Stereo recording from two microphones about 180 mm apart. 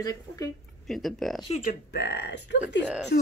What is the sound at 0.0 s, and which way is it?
Speech, 20° left (ahead or behind).